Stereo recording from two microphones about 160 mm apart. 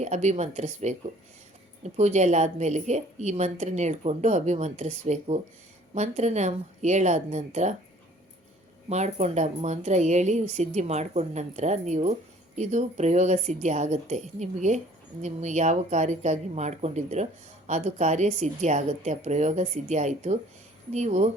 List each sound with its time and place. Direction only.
0.0 s a woman's voice: 45° right (ahead or behind)
8.9 s a woman's voice: 45° right (ahead or behind)